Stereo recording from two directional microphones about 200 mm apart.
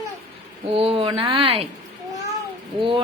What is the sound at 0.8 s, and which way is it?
Speech, 25° right (ahead or behind).